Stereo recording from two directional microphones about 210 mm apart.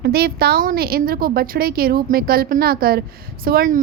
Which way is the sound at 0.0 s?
50° right (ahead or behind).